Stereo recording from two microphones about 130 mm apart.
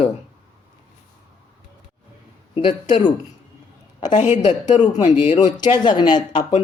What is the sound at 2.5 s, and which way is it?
Speech, 40° left (ahead or behind).